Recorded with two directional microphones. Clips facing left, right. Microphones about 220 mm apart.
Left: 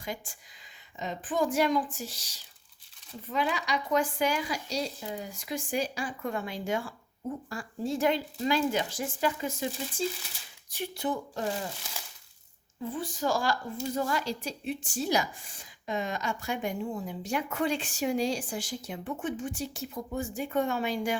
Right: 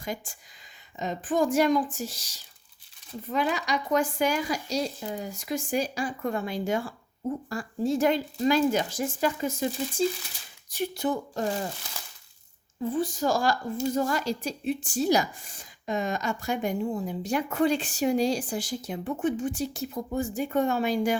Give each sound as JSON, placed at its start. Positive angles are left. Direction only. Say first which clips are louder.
{"t": 0.0, "sound": "a woman's voice", "louder": "right 3 dB", "side_deg": -45}
{"t": 12.9, "sound": "a woman's voice", "louder": "right 4 dB", "side_deg": -40}